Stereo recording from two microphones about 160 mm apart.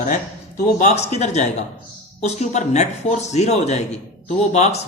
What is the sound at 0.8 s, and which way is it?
Speech, 45° left (ahead or behind).